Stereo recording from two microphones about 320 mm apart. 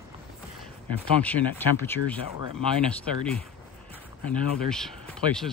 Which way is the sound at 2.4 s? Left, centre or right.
Centre.